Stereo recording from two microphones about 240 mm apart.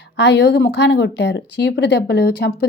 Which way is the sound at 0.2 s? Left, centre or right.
Left.